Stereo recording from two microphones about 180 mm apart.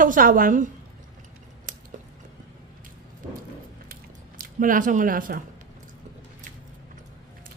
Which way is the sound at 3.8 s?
50° right (ahead or behind).